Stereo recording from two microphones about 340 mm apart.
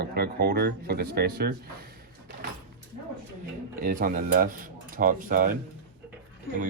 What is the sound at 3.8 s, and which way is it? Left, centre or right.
Speech, right.